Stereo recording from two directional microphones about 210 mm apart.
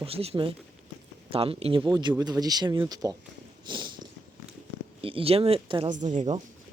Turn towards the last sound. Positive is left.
turn(degrees=-35)  # may be behind; listen again after turning